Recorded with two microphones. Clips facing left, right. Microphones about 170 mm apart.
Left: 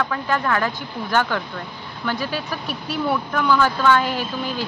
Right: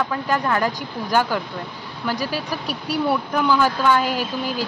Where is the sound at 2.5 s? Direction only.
35° right (ahead or behind).